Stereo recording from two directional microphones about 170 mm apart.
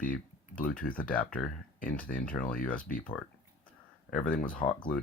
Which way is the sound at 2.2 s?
5° left (ahead or behind).